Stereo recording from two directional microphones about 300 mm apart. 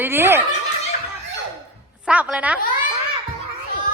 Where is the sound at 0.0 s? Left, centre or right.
Centre.